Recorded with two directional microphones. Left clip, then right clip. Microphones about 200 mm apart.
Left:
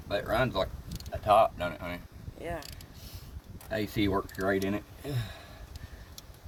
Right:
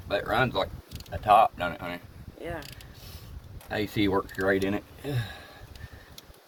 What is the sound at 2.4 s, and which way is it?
Speech, 15° left (ahead or behind).